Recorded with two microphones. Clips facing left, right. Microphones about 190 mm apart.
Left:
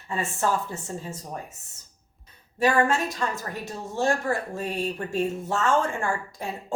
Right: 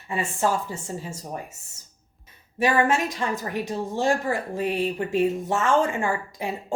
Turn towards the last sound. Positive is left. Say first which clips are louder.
# right 2 dB
turn(degrees=-15)  # may be behind; listen again after turning